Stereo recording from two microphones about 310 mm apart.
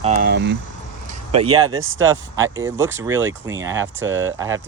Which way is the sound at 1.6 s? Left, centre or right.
Right.